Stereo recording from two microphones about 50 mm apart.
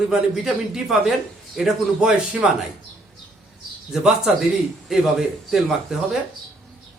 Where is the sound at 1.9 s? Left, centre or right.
Centre.